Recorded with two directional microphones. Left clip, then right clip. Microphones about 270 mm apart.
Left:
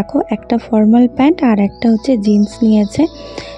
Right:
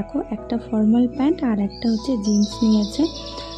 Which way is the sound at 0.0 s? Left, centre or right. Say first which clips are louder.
Left 10 dB; left.